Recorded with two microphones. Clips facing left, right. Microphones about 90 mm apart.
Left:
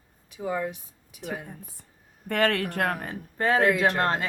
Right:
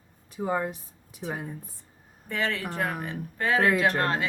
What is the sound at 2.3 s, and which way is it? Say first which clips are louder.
Speech: left 5 dB; 60° left (ahead or behind).